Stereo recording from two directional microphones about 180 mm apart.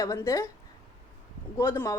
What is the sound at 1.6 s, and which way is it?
Speech, 15° left (ahead or behind).